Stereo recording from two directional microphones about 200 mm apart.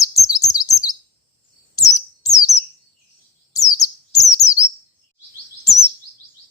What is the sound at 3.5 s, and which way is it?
Bird, 15° left (ahead or behind).